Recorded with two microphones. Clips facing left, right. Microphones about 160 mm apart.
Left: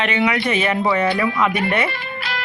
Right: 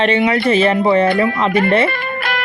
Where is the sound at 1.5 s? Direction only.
50° right (ahead or behind).